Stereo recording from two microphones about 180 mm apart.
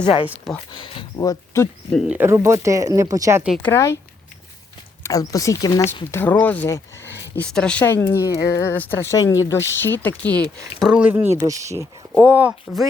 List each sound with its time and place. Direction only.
0.0 s speech: 30° left (ahead or behind)
0.3 s speech: centre (ahead or behind)
0.7 s speech: 25° left (ahead or behind)
2.0 s speech: 10° right (ahead or behind)
3.6 s speech: 15° left (ahead or behind)
5.0 s speech: 20° left (ahead or behind); by 12.9 s 5° right (ahead or behind)